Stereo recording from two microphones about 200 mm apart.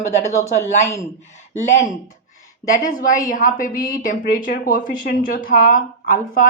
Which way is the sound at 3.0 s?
45° left (ahead or behind).